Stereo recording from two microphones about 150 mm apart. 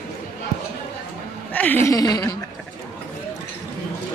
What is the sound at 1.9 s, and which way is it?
Speech, 25° left (ahead or behind).